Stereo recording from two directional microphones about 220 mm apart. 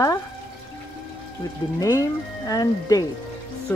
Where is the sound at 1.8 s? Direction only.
15° left (ahead or behind).